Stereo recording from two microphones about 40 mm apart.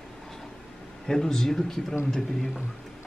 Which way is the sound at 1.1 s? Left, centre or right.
Centre.